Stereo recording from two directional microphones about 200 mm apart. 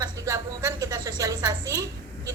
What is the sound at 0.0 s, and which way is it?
A woman's voice, 15° right (ahead or behind).